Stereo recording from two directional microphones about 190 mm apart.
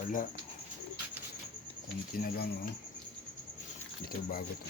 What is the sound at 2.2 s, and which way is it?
Speech, 55° left (ahead or behind).